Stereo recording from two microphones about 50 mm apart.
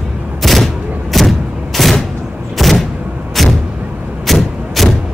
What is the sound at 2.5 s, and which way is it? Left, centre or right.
Vehicle, centre.